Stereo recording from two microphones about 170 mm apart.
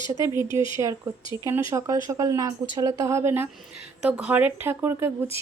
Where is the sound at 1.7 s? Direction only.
20° right (ahead or behind).